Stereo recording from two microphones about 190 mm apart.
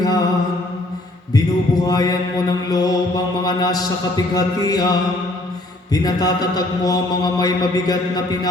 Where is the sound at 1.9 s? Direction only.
20° left (ahead or behind).